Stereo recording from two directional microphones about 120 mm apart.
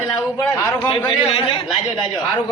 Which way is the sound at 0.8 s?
50° left (ahead or behind).